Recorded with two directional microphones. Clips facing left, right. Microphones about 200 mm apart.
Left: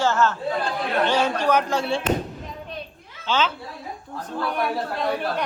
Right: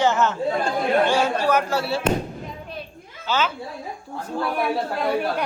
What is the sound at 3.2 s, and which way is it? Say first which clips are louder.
A man's voice: even; 10° right (ahead or behind).